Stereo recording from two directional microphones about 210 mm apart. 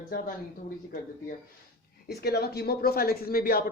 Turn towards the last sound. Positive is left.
turn(degrees=45)  # may be behind; listen again after turning